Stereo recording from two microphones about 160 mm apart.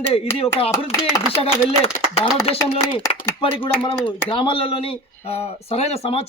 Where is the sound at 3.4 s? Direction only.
35° left (ahead or behind).